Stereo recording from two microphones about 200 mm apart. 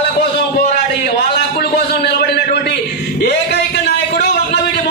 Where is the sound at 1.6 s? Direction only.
55° left (ahead or behind).